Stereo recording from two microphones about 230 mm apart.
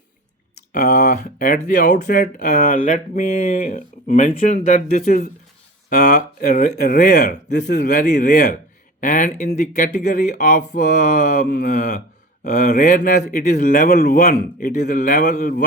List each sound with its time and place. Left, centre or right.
0.7 s speech: left